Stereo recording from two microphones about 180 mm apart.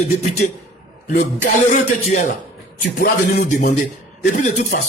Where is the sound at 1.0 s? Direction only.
45° left (ahead or behind).